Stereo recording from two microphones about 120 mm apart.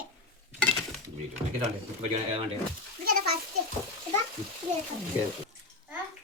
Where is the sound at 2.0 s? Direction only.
55° right (ahead or behind).